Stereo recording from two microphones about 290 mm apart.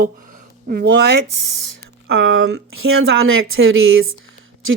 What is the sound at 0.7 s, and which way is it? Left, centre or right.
Speech, right.